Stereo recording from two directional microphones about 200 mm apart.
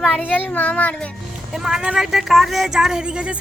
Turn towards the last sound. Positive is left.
turn(degrees=-5)  # may be behind; listen again after turning